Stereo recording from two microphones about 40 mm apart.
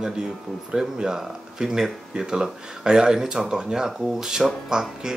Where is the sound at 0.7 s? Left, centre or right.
Centre.